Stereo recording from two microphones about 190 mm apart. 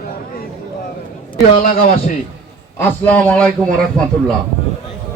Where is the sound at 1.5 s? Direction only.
45° left (ahead or behind).